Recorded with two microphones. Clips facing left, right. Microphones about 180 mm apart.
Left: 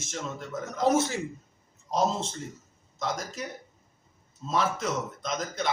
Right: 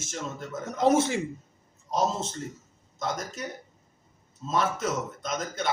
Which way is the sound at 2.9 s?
Centre (ahead or behind).